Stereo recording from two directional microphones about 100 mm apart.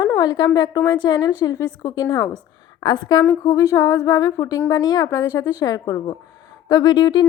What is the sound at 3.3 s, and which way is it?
A woman's voice, 30° left (ahead or behind).